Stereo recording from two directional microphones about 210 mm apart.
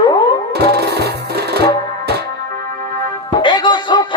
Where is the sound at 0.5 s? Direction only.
50° right (ahead or behind).